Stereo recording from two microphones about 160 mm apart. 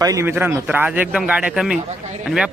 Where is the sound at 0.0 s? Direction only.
20° right (ahead or behind).